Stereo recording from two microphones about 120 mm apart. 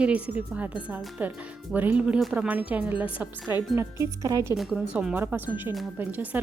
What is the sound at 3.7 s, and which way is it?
Speech, 25° right (ahead or behind).